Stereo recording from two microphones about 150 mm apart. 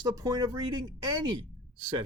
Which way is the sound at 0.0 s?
25° right (ahead or behind).